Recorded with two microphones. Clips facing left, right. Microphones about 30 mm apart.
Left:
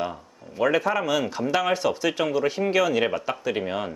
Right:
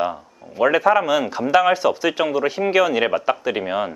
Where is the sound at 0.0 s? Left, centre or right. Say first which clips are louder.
Right 6 dB; centre.